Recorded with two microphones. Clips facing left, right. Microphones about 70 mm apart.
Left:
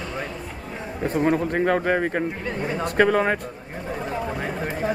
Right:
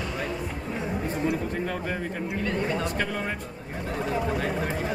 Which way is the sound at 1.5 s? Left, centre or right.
Left.